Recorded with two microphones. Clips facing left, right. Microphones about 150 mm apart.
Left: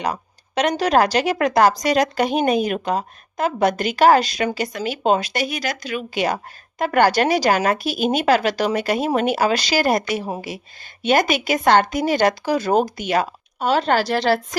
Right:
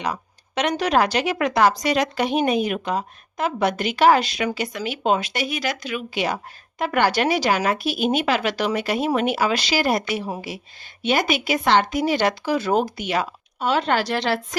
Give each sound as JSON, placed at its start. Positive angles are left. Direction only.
{"t": 0.0, "sound": "speech", "side_deg": 40}